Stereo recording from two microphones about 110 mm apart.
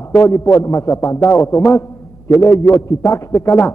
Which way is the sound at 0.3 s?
30° left (ahead or behind).